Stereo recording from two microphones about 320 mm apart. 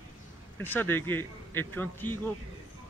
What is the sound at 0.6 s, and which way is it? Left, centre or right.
Speech, centre.